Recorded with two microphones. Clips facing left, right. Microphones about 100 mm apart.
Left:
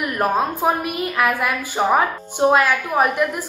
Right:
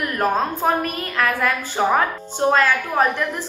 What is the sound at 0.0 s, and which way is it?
A woman's voice, 10° left (ahead or behind).